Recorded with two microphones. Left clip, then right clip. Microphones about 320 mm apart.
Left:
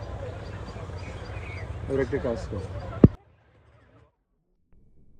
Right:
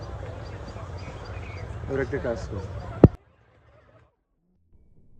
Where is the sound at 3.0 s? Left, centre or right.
Centre.